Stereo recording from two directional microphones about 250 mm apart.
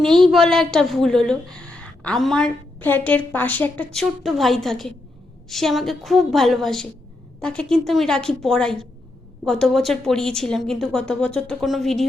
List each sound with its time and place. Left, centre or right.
0.0 s a woman's voice: centre